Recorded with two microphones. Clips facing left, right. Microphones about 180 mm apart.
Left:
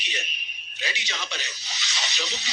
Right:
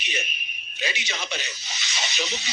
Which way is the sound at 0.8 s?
20° right (ahead or behind).